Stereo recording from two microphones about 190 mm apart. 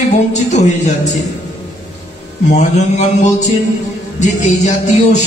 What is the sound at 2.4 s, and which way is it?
A man's voice, 40° left (ahead or behind).